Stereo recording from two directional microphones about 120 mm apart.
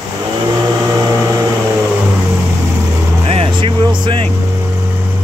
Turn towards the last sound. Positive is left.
turn(degrees=-45)  # may be behind; listen again after turning